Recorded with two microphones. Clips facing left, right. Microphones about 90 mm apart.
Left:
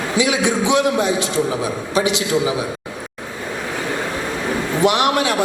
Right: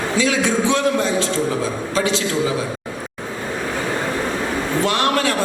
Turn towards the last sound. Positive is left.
turn(degrees=15)  # may be behind; listen again after turning